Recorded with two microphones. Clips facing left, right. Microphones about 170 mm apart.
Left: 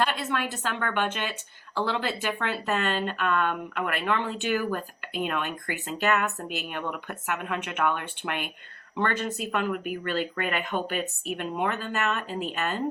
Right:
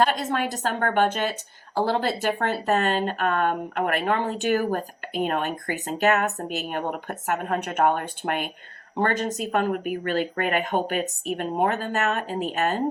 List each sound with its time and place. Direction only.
0.0 s speech: 40° right (ahead or behind)